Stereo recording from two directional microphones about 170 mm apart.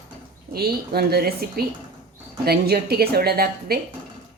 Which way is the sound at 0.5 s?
65° right (ahead or behind).